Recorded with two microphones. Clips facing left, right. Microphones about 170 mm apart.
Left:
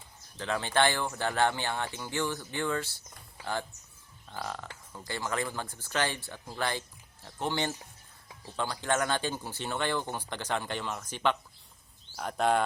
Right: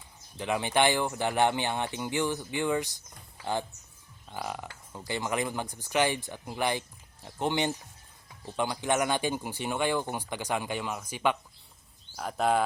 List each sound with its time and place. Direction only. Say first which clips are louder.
0.3 s speech: right 2 dB; 15° right (ahead or behind)